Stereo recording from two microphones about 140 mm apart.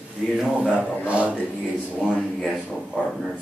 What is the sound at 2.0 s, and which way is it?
Speech, 5° left (ahead or behind).